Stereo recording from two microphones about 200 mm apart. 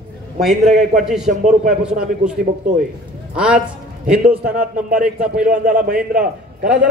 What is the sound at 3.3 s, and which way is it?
A man's voice, 5° right (ahead or behind).